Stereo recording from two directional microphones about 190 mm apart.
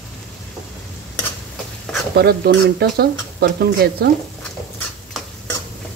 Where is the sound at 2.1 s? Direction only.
55° right (ahead or behind).